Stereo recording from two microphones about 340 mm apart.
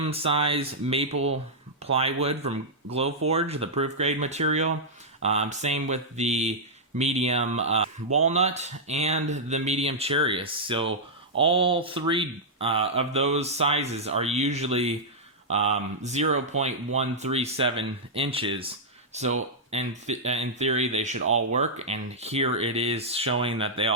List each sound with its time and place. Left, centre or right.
0.0 s speech: centre
1.1 s speech: right
1.8 s speech: centre